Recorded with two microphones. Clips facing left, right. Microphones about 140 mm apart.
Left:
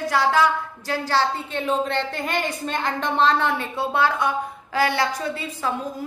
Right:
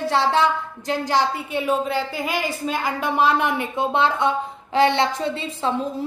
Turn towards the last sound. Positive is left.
turn(degrees=-25)  # may be behind; listen again after turning